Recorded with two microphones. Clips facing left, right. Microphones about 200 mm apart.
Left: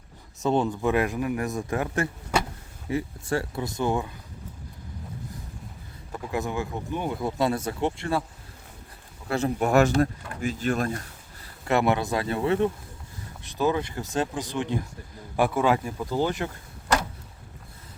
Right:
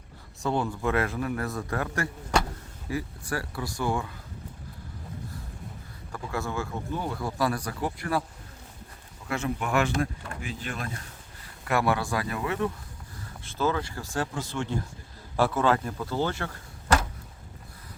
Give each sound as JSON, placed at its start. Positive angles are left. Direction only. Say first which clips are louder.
{"t": 0.3, "sound": "a man's voice", "louder": "left 4 dB", "side_deg": 20}
{"t": 6.1, "sound": "speech", "louder": "left 3 dB", "side_deg": 20}
{"t": 9.3, "sound": "speech", "louder": "left 6 dB", "side_deg": 35}
{"t": 11.6, "sound": "a man's voice", "louder": "left 3 dB", "side_deg": 25}